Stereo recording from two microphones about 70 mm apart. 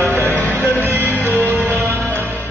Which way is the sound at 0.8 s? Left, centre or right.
Right.